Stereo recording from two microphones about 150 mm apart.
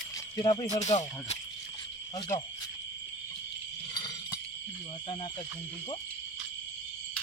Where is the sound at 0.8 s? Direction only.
50° left (ahead or behind).